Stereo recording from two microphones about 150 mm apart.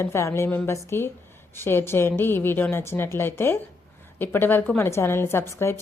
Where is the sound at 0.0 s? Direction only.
15° left (ahead or behind).